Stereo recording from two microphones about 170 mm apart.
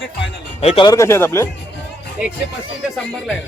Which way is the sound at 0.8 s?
20° left (ahead or behind).